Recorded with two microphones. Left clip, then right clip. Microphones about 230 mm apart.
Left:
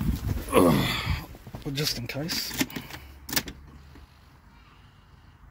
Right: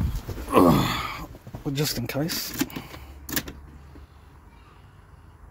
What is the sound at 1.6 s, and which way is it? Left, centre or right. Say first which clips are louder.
Speech: right 2 dB; centre.